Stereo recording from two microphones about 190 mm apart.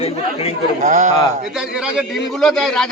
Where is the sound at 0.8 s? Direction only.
40° right (ahead or behind).